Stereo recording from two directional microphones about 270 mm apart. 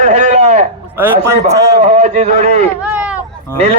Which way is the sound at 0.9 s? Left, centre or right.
Centre.